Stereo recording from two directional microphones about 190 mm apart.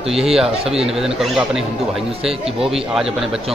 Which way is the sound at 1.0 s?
Centre (ahead or behind).